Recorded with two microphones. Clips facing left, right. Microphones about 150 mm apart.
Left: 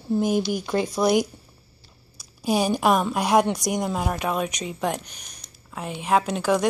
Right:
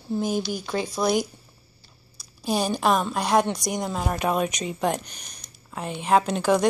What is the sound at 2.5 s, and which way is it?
A woman's voice, 10° left (ahead or behind).